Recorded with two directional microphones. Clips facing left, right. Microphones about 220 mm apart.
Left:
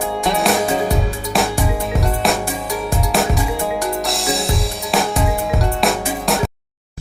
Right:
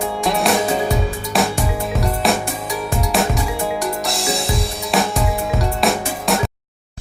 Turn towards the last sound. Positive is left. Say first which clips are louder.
# left 1 dB
turn(degrees=0)  # may be behind; listen again after turning